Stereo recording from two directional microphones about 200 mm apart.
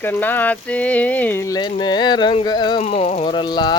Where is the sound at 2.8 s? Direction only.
30° left (ahead or behind).